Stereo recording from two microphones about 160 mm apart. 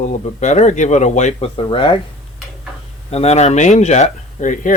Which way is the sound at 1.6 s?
30° left (ahead or behind).